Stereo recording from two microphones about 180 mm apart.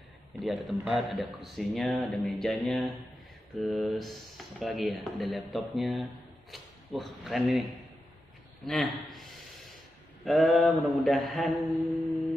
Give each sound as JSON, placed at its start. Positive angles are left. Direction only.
{"t": 0.4, "sound": "speech", "side_deg": 0}
{"t": 8.6, "sound": "speech", "side_deg": 0}
{"t": 9.1, "sound": "a sound", "side_deg": 0}
{"t": 10.2, "sound": "speech", "side_deg": 0}